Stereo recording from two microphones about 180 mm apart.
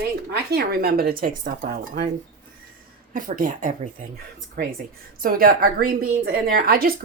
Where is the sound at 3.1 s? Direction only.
45° right (ahead or behind).